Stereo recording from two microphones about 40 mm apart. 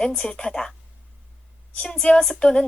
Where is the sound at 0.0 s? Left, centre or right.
Centre.